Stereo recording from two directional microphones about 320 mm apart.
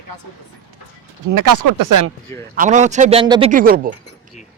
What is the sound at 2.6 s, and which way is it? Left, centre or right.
A man's voice, right.